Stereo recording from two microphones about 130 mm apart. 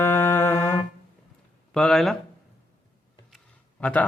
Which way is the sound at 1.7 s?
Centre (ahead or behind).